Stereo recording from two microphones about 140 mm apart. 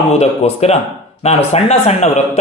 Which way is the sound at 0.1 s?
50° left (ahead or behind).